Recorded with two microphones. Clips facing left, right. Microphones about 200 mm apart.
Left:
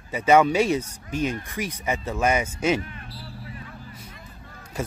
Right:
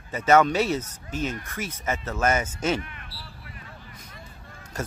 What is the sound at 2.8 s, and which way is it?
Vehicle, 35° left (ahead or behind).